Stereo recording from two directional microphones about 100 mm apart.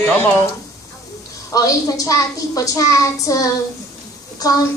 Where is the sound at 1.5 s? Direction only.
35° left (ahead or behind).